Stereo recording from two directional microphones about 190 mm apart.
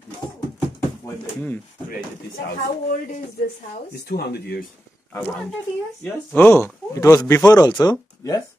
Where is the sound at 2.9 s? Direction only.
40° left (ahead or behind).